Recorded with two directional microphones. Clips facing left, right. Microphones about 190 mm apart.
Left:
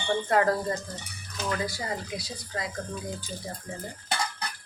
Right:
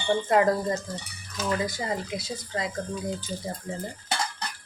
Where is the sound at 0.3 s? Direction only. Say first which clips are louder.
Right 2 dB; 20° right (ahead or behind).